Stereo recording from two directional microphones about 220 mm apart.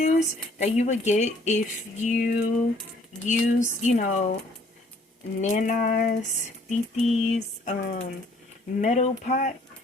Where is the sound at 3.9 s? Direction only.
35° left (ahead or behind).